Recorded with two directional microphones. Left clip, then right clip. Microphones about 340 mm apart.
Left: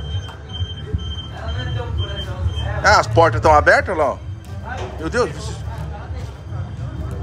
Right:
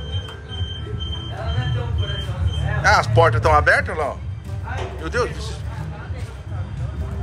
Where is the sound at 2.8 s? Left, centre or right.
Centre.